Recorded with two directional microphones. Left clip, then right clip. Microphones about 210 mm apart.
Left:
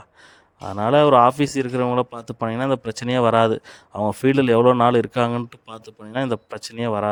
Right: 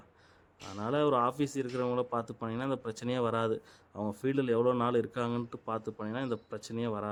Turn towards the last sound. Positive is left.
turn(degrees=45)  # may be behind; listen again after turning